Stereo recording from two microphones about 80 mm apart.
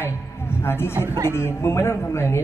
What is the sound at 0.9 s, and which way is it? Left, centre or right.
Speech, right.